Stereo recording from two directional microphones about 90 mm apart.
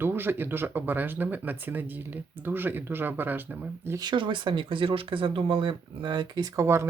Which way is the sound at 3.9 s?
60° right (ahead or behind).